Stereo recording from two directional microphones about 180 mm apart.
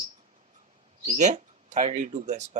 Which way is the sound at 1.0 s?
40° right (ahead or behind).